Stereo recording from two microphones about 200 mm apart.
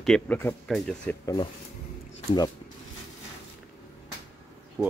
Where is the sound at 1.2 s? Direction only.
25° left (ahead or behind).